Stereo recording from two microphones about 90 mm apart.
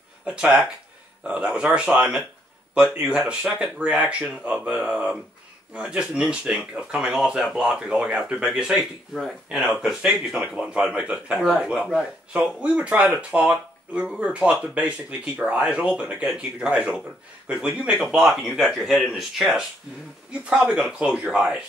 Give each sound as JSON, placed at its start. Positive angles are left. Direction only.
{"t": 0.2, "sound": "speech", "side_deg": -15}
{"t": 11.3, "sound": "speech", "side_deg": 5}
{"t": 11.6, "sound": "speech", "side_deg": -10}